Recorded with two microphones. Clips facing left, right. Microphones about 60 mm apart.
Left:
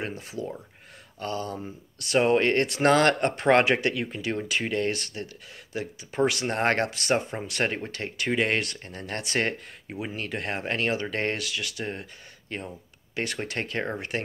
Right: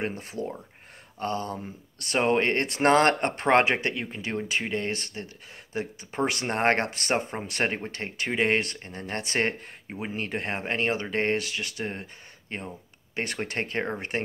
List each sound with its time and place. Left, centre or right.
0.0 s speech: right
1.2 s speech: right
5.7 s speech: right